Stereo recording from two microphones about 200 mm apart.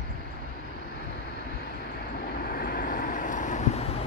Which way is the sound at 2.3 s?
50° left (ahead or behind).